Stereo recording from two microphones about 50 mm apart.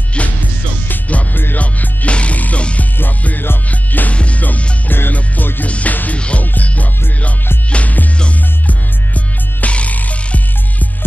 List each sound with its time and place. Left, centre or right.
1.0 s music: left
3.0 s music: left
4.1 s music: left
6.4 s music: left